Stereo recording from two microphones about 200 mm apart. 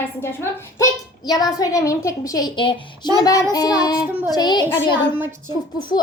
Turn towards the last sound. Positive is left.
turn(degrees=20)  # may be behind; listen again after turning